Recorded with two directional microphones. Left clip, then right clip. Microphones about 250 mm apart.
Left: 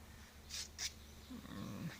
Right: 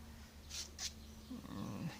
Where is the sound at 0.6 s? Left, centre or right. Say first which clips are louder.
Even; left.